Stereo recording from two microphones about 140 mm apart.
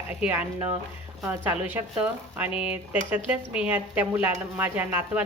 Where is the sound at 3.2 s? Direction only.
10° right (ahead or behind).